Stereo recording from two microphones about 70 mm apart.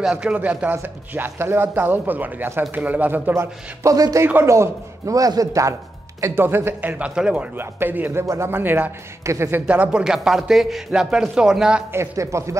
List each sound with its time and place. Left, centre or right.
0.0 s a man's voice: centre; by 3.4 s right
3.8 s a man's voice: right
6.2 s a man's voice: right
7.0 s a man's voice: centre
7.5 s a man's voice: right
8.5 s speech: right
9.2 s a man's voice: right
9.7 s a man's voice: centre
11.9 s a man's voice: right